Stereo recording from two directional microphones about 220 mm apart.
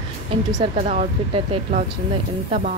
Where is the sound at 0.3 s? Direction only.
30° right (ahead or behind).